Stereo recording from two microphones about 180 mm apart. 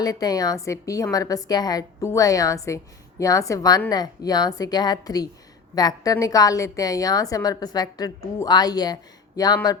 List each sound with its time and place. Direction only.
0.0 s a woman's voice: 20° left (ahead or behind)